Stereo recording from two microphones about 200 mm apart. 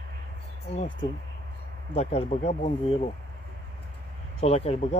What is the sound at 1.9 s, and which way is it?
Speech, 30° left (ahead or behind).